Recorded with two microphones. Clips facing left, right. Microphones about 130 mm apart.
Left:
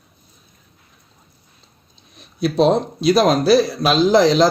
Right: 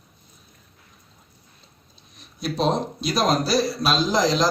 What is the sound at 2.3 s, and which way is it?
A man's voice, 65° left (ahead or behind).